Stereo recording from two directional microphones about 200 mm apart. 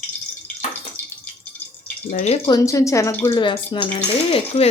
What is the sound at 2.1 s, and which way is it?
Speech, 40° left (ahead or behind).